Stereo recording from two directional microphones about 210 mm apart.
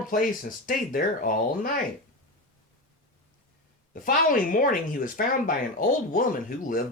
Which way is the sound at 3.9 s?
40° left (ahead or behind).